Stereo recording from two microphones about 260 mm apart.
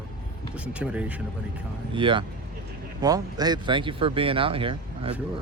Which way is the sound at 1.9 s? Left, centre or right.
Centre.